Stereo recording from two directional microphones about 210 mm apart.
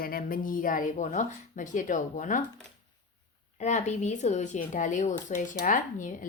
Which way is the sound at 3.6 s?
35° left (ahead or behind).